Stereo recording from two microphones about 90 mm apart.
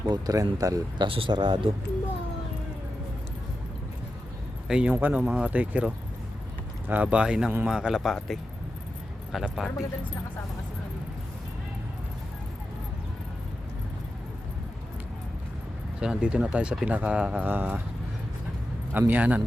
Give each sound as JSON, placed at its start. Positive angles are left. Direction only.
{"t": 0.1, "sound": "speech", "side_deg": -40}
{"t": 0.9, "sound": "speech", "side_deg": -75}
{"t": 4.7, "sound": "a man's voice", "side_deg": -10}
{"t": 16.0, "sound": "speech", "side_deg": -10}
{"t": 18.9, "sound": "speech", "side_deg": -20}